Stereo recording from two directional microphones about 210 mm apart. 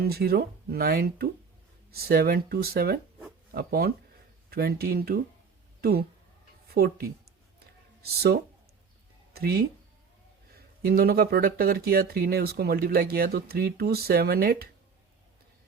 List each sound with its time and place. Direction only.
0.0 s speech: 45° right (ahead or behind)
9.3 s speech: 45° right (ahead or behind)
10.8 s speech: 45° right (ahead or behind)